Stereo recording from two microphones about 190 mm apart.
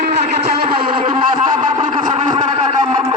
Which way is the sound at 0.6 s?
25° right (ahead or behind).